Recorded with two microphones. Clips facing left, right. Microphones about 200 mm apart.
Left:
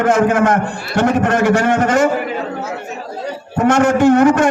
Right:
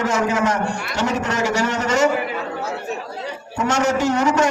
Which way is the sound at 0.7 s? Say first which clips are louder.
Even; 30° left (ahead or behind).